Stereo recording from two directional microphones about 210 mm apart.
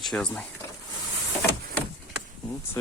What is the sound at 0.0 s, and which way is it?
Speech, 5° left (ahead or behind).